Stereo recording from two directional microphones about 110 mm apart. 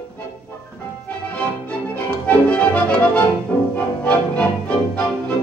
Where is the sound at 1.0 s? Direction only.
10° left (ahead or behind).